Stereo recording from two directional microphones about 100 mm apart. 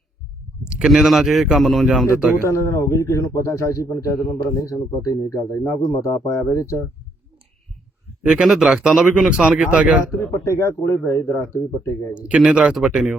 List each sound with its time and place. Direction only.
0.6 s speech: 10° right (ahead or behind)
2.4 s speech: 30° left (ahead or behind)
8.2 s speech: 5° right (ahead or behind)
10.4 s a man's voice: 30° left (ahead or behind)
12.1 s speech: 10° right (ahead or behind)